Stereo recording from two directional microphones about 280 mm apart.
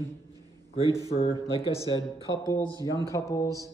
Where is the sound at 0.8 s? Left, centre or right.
Centre.